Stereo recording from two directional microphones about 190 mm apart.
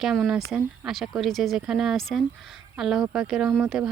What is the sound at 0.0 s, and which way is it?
Speech, centre (ahead or behind).